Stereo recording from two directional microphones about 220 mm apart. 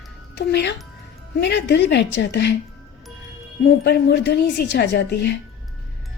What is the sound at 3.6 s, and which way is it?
A woman's voice, 50° left (ahead or behind).